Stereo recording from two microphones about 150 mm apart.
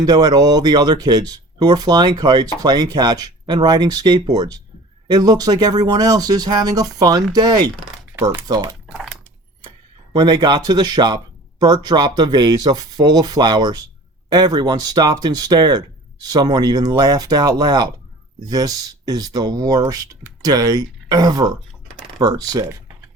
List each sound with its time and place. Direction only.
0.0 s speech: 30° right (ahead or behind)
10.1 s speech: 30° right (ahead or behind)